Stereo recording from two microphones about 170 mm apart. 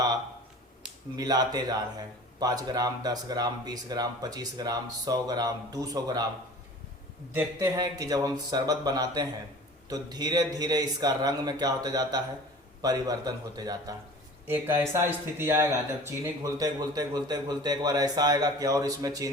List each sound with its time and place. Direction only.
1.1 s speech: 25° right (ahead or behind)
7.8 s speech: 20° right (ahead or behind)